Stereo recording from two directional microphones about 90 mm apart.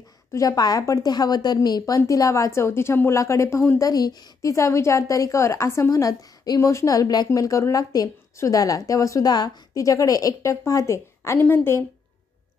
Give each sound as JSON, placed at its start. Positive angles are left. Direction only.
{"t": 0.3, "sound": "a woman's voice", "side_deg": 40}
{"t": 4.4, "sound": "a woman's voice", "side_deg": 35}